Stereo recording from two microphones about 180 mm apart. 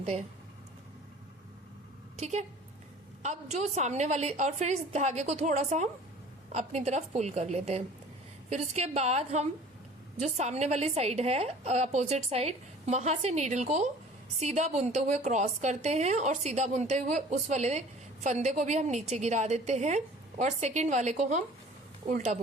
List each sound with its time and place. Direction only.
0.0 s speech: 35° right (ahead or behind)
2.1 s a woman's voice: 40° right (ahead or behind)